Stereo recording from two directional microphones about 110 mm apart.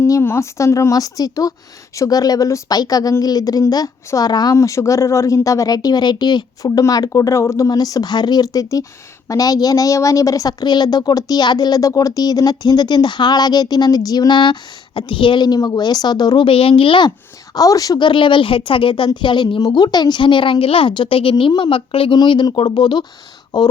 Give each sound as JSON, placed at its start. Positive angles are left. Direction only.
{"t": 0.0, "sound": "speech", "side_deg": 25}
{"t": 16.5, "sound": "speech", "side_deg": 60}
{"t": 17.5, "sound": "a woman's voice", "side_deg": 35}
{"t": 22.2, "sound": "a woman's voice", "side_deg": 40}